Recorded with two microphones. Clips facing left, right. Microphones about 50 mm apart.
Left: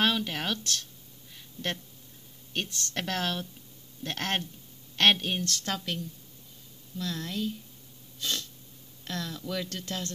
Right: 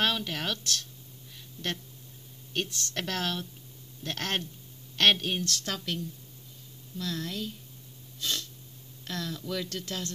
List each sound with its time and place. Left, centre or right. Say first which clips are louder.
0.0 s speech: left 2 dB; centre
1.3 s a sound: left 1 dB; centre
2.5 s speech: right 1 dB; centre
5.5 s speech: left 1 dB; left
7.0 s speech: left 1 dB; centre
8.2 s a sound: even; left
9.0 s speech: even; centre
9.8 s speech: even; left